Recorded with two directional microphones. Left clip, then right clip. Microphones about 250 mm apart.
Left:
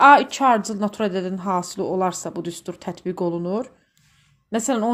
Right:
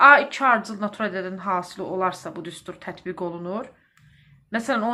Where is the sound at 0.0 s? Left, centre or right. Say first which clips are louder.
Left 1 dB; left.